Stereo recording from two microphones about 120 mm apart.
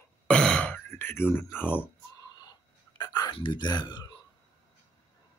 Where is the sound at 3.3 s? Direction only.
40° left (ahead or behind).